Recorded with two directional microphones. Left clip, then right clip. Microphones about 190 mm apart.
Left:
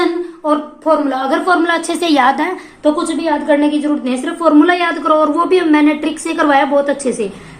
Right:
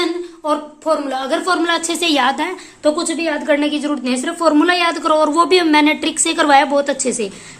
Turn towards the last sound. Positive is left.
turn(degrees=-20)  # may be behind; listen again after turning